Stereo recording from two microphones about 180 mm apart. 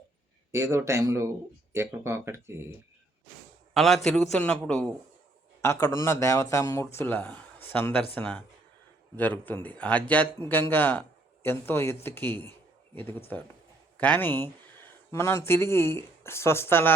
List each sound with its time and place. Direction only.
0.5 s speech: 15° right (ahead or behind)
3.8 s a man's voice: centre (ahead or behind)
5.6 s speech: 15° left (ahead or behind)